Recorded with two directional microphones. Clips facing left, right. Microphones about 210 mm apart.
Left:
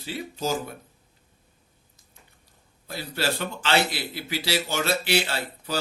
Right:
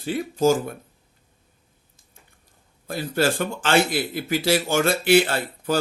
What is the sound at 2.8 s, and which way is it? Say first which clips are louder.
A man's voice: right 6 dB; 50° right (ahead or behind).